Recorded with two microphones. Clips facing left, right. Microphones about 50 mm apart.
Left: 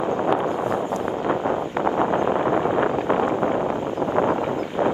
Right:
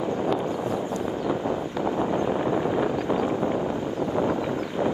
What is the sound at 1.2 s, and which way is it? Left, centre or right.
Wind noise, left.